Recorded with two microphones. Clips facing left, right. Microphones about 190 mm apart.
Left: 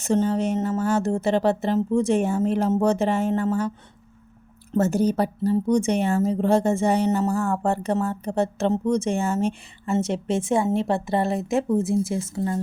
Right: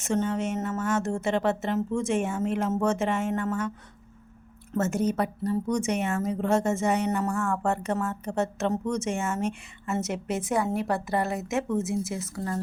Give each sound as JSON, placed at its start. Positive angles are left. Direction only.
{"t": 0.0, "sound": "speech", "side_deg": 35}
{"t": 4.7, "sound": "speech", "side_deg": 35}